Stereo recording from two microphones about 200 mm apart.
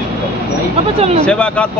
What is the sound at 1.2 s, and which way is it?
Speech, 5° left (ahead or behind).